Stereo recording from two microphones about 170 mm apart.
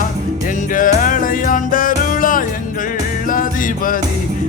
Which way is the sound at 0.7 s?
55° left (ahead or behind).